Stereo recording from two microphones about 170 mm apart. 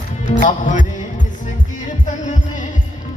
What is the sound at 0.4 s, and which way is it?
Music, 45° left (ahead or behind).